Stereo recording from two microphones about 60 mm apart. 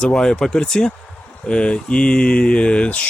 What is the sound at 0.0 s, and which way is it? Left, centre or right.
A man's voice, centre.